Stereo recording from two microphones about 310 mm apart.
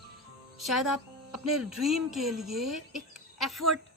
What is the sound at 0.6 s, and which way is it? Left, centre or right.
A woman's voice, centre.